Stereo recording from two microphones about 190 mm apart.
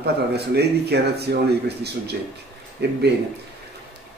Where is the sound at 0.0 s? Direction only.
60° right (ahead or behind).